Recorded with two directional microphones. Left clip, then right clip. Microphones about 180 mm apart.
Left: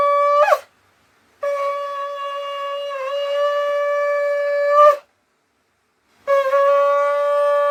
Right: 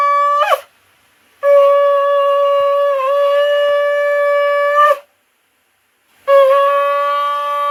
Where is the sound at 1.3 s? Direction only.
55° left (ahead or behind).